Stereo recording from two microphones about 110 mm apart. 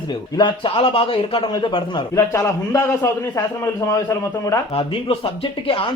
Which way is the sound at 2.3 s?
30° left (ahead or behind).